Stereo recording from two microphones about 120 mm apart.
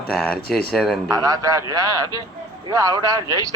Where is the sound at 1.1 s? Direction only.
30° right (ahead or behind).